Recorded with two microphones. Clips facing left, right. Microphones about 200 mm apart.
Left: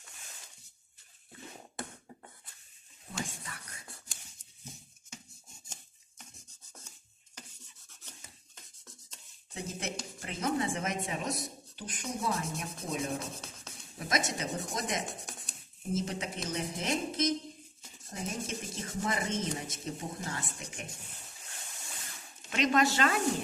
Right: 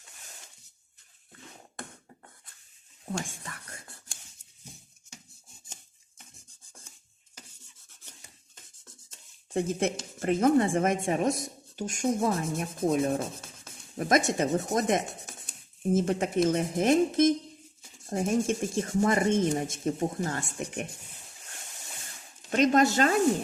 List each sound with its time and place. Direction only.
3.1 s speech: 50° right (ahead or behind)
9.5 s speech: 55° right (ahead or behind)
22.4 s speech: 45° right (ahead or behind)